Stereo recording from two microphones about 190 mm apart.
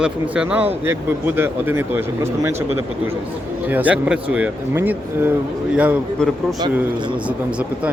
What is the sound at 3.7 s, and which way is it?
Speech, 10° right (ahead or behind).